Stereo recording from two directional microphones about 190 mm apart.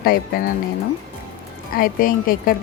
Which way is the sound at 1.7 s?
50° left (ahead or behind).